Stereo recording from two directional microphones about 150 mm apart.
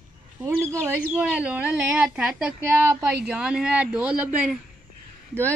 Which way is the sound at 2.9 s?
20° right (ahead or behind).